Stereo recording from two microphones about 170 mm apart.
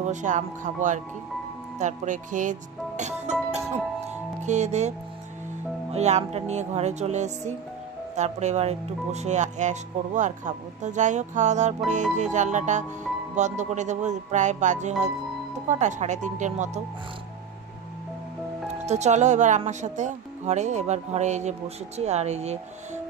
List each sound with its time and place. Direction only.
0.0 s speech: 45° right (ahead or behind)
3.0 s music: 40° right (ahead or behind)
4.4 s speech: 45° right (ahead or behind)
5.9 s music: 40° right (ahead or behind)
8.2 s speech: 40° right (ahead or behind)
18.9 s speech: 40° right (ahead or behind)